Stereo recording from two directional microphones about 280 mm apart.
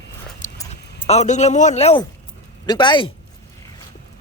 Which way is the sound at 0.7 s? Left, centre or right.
Left.